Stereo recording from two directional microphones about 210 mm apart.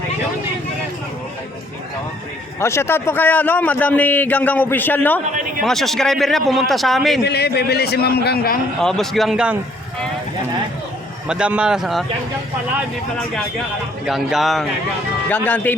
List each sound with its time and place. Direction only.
2.6 s a man's voice: 15° left (ahead or behind)
7.3 s a man's voice: 50° left (ahead or behind)
8.8 s a man's voice: centre (ahead or behind)
11.3 s a man's voice: 5° right (ahead or behind)
14.0 s a man's voice: centre (ahead or behind)